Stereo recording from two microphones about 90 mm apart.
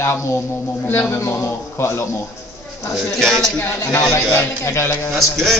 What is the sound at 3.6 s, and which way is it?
Speech, 25° left (ahead or behind).